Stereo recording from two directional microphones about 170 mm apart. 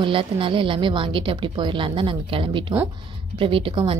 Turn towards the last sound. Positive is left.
turn(degrees=-30)  # may be behind; listen again after turning